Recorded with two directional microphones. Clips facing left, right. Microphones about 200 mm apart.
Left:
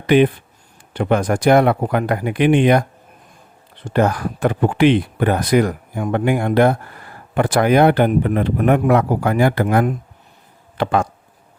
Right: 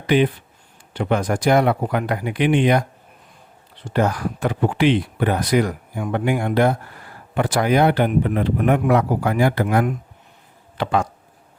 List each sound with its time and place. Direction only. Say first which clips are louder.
0.9 s speech: left 3 dB; 55° left (ahead or behind)
3.8 s a man's voice: left 3 dB; 55° left (ahead or behind)